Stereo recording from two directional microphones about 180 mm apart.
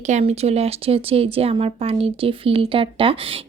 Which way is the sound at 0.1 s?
35° right (ahead or behind).